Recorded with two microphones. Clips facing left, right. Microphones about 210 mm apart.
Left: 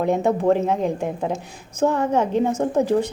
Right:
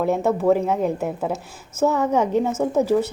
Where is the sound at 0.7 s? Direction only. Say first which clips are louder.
Even; 10° right (ahead or behind).